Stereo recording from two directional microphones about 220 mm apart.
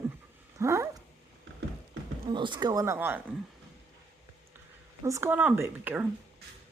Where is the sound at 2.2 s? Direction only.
20° right (ahead or behind).